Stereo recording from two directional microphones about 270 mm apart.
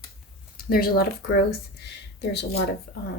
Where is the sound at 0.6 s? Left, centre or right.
Left.